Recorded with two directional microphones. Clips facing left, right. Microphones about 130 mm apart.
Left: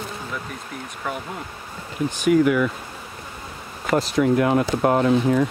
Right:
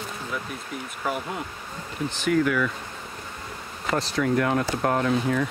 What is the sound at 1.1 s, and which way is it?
Speech, 5° right (ahead or behind).